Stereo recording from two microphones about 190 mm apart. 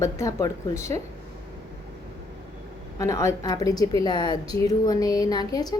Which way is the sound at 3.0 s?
15° left (ahead or behind).